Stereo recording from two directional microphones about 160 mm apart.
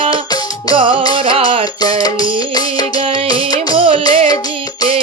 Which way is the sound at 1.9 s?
25° left (ahead or behind).